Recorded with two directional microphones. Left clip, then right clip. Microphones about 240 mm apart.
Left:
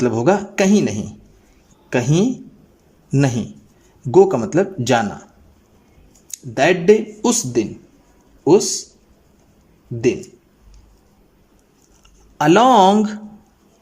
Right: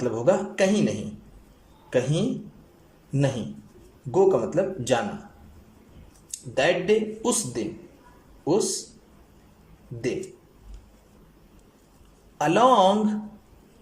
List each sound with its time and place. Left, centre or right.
0.0 s speech: left
6.3 s speech: left
12.4 s speech: left